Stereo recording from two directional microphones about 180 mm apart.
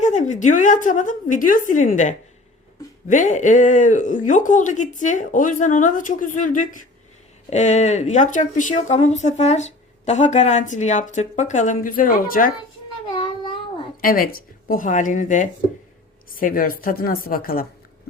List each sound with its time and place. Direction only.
0.0 s speech: 40° left (ahead or behind)
13.1 s a sound: 25° left (ahead or behind)
14.0 s speech: 50° left (ahead or behind)